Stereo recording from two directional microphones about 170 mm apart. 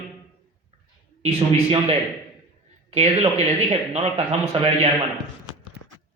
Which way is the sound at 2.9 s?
40° right (ahead or behind).